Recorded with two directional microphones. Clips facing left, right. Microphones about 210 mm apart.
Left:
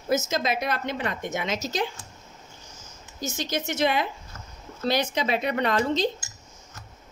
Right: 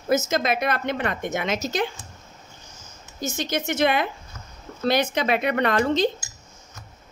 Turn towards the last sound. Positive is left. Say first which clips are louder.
# right 3 dB
turn(degrees=-55)  # may be behind; listen again after turning